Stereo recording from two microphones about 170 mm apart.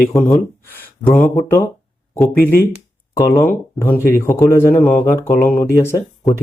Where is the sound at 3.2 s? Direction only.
15° left (ahead or behind).